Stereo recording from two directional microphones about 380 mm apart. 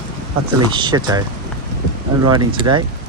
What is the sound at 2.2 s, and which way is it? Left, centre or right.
Speech, centre.